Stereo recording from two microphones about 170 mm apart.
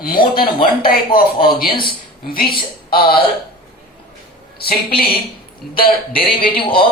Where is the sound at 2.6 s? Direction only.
30° left (ahead or behind).